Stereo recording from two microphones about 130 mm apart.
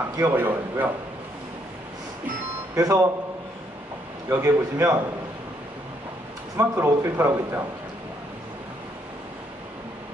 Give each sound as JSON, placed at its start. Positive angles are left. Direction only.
{"t": 0.2, "sound": "a man's voice", "side_deg": -15}
{"t": 2.7, "sound": "a man's voice", "side_deg": -25}
{"t": 4.3, "sound": "a man's voice", "side_deg": -20}
{"t": 6.5, "sound": "a man's voice", "side_deg": -25}